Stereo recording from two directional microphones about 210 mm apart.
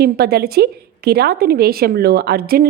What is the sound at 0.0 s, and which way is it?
A woman's voice, 50° right (ahead or behind).